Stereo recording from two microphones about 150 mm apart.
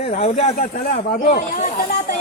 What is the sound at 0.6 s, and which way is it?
Speech, 75° left (ahead or behind).